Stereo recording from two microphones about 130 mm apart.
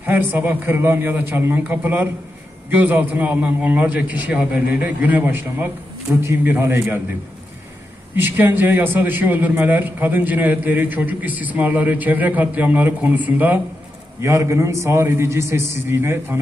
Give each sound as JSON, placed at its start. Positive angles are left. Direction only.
{"t": 0.0, "sound": "a man's voice", "side_deg": -15}
{"t": 8.2, "sound": "a man's voice", "side_deg": -15}